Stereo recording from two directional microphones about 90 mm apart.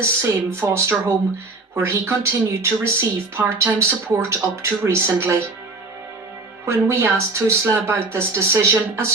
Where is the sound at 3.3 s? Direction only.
30° right (ahead or behind).